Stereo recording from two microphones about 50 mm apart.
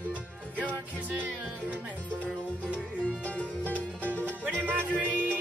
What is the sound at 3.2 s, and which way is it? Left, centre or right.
Music, left.